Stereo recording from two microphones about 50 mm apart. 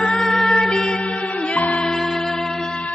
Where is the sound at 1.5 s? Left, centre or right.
Left.